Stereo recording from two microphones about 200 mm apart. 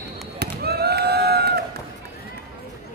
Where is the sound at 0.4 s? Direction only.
50° right (ahead or behind).